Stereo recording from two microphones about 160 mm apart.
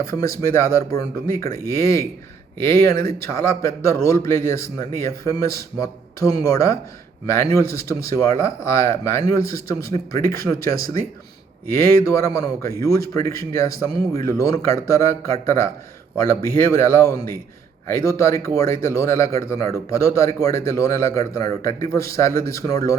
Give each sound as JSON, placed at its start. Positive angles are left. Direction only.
{"t": 0.0, "sound": "a man's voice", "side_deg": 20}